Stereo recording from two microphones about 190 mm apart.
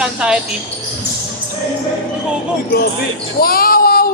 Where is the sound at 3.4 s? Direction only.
50° left (ahead or behind).